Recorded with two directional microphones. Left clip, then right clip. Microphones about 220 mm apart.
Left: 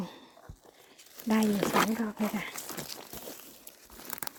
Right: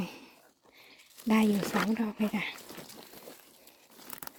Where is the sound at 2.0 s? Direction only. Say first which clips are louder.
Right 1 dB; 20° right (ahead or behind).